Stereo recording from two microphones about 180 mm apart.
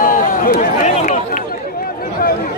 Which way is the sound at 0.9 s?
40° left (ahead or behind).